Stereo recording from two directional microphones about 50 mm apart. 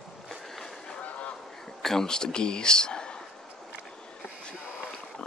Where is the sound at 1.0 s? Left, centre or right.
Left.